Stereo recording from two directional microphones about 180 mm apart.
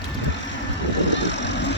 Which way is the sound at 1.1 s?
80° left.